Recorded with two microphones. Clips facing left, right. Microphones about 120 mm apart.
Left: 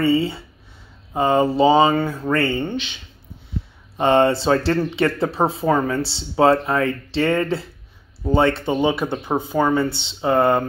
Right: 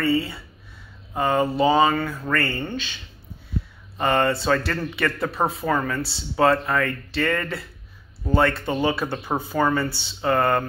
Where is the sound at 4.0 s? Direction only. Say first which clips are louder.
Left 5 dB; 25° left (ahead or behind).